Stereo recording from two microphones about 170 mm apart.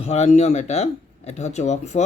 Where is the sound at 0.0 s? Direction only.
40° left (ahead or behind).